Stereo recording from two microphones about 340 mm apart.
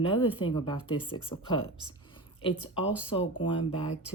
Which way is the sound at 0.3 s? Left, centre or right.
Centre.